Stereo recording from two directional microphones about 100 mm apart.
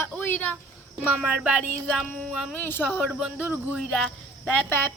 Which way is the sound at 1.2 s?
10° right (ahead or behind).